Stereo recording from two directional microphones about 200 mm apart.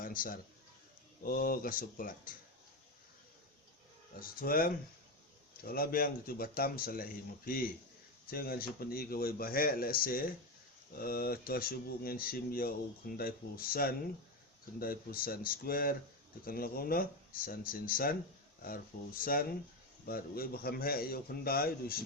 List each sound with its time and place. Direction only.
0.0 s a sound: 45° left (ahead or behind)
1.2 s speech: 45° left (ahead or behind)
4.2 s speech: 45° left (ahead or behind)